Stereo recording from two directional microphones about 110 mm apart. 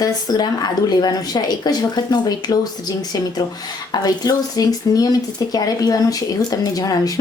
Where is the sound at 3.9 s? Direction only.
35° left (ahead or behind).